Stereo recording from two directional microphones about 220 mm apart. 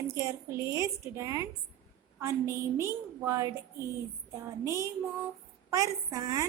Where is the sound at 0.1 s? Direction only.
15° right (ahead or behind).